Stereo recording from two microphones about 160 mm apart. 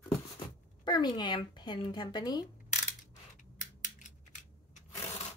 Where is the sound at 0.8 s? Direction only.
25° left (ahead or behind).